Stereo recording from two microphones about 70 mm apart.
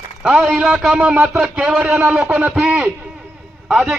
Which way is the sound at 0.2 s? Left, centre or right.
Centre.